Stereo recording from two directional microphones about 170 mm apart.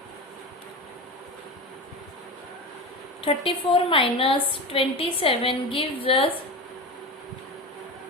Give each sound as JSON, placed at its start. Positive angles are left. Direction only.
{"t": 3.2, "sound": "a woman's voice", "side_deg": 30}